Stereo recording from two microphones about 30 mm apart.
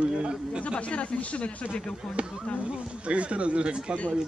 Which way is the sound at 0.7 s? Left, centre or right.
Left.